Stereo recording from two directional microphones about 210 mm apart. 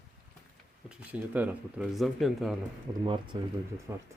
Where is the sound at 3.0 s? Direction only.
25° right (ahead or behind).